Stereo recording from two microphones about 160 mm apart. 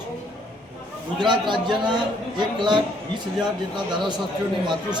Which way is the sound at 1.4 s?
30° right (ahead or behind).